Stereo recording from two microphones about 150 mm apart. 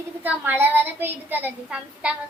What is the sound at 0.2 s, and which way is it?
A woman's voice, 10° right (ahead or behind).